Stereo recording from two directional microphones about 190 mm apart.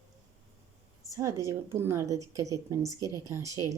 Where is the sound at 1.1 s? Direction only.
15° right (ahead or behind).